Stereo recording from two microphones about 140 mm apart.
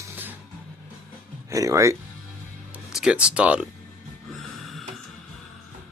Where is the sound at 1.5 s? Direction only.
20° right (ahead or behind).